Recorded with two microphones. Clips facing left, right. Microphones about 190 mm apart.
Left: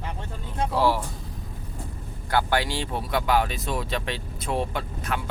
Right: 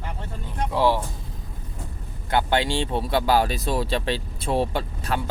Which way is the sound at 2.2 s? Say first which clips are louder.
Right 2 dB; 25° right (ahead or behind).